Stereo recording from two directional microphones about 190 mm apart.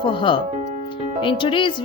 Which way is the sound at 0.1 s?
25° left (ahead or behind).